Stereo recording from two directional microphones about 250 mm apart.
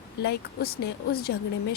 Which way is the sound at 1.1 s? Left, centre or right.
Left.